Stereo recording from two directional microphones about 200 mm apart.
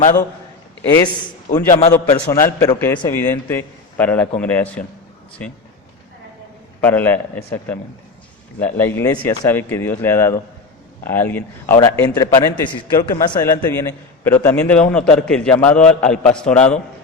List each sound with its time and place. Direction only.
0.9 s a man's voice: 15° left (ahead or behind)
1.5 s a man's voice: 40° left (ahead or behind)
1.9 s a man's voice: 15° left (ahead or behind)
6.8 s a man's voice: 10° left (ahead or behind)